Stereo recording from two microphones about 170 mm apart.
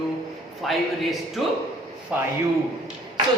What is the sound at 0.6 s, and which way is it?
A woman's voice, centre (ahead or behind).